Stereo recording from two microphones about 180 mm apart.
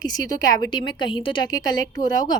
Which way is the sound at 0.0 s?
20° left (ahead or behind).